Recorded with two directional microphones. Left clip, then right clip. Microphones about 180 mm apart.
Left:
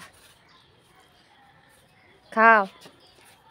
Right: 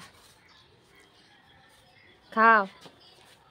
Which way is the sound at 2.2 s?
5° left (ahead or behind).